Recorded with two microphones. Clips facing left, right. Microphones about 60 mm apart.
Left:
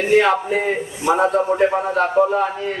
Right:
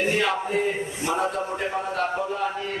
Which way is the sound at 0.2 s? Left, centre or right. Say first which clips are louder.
Left 7 dB; left.